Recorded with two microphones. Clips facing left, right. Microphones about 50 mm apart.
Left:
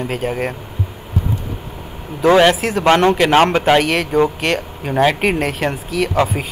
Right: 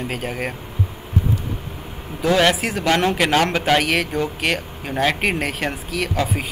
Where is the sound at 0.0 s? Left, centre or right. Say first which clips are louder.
Left 5 dB; centre.